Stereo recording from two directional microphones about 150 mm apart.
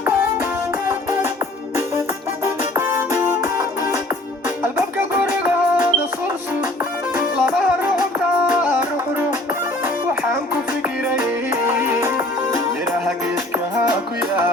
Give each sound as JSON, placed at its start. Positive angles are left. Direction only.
{"t": 2.4, "sound": "music", "side_deg": -15}
{"t": 5.3, "sound": "music", "side_deg": -10}
{"t": 11.6, "sound": "music", "side_deg": -15}